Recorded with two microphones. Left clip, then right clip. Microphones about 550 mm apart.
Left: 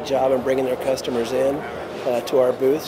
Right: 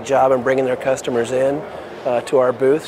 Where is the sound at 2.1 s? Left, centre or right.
Right.